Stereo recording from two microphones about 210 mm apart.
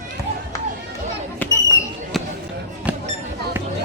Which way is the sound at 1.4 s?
10° left (ahead or behind).